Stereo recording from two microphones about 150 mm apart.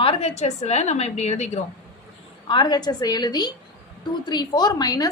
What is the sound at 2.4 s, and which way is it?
A woman's voice, 30° left (ahead or behind).